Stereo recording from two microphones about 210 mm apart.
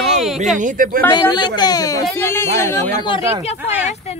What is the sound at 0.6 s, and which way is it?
Speech, 40° right (ahead or behind).